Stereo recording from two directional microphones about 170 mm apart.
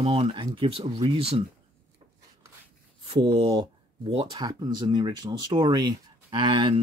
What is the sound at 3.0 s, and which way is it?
Speech, 35° right (ahead or behind).